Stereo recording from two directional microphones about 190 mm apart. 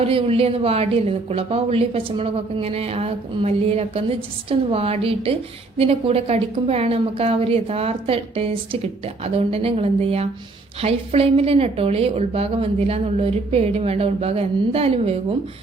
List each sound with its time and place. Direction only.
0.0 s speech: 30° right (ahead or behind)